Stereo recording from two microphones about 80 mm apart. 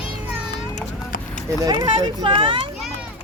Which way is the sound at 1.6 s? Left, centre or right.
Right.